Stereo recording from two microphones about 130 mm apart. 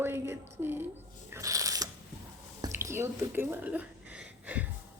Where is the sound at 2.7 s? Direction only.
20° right (ahead or behind).